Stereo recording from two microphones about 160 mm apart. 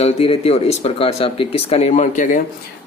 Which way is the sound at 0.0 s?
40° left (ahead or behind).